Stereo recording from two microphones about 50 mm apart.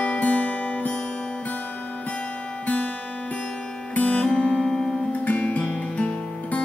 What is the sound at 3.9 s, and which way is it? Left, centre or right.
Music, left.